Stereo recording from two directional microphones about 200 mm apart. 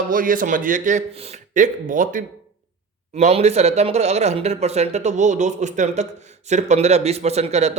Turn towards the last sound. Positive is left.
turn(degrees=-35)  # may be behind; listen again after turning